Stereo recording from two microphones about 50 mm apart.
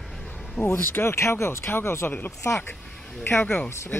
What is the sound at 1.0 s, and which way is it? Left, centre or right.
Speech, left.